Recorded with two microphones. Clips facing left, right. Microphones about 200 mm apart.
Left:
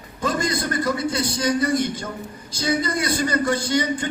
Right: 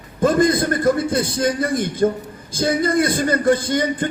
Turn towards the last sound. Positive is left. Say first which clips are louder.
# right 2 dB
turn(degrees=-50)  # may be behind; listen again after turning